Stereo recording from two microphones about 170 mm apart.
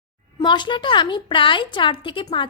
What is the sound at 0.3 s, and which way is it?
Speech, 25° left (ahead or behind).